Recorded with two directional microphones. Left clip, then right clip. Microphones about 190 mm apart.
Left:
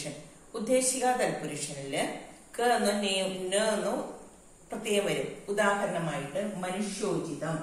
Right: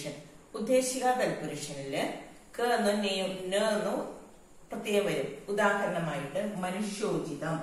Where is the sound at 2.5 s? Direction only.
20° left (ahead or behind).